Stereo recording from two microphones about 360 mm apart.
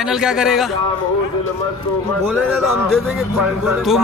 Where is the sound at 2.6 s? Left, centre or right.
Centre.